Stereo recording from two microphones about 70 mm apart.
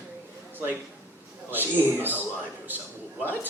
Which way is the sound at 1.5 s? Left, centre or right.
Right.